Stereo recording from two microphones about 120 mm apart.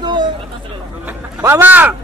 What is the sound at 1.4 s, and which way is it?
Speech, 20° right (ahead or behind).